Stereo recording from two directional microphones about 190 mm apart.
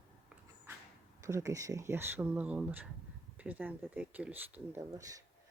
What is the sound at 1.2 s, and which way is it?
Speech, 15° right (ahead or behind).